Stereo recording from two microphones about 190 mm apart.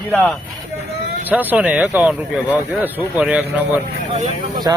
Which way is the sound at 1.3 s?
10° right (ahead or behind).